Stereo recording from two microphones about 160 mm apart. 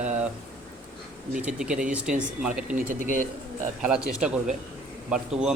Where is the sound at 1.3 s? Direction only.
5° right (ahead or behind).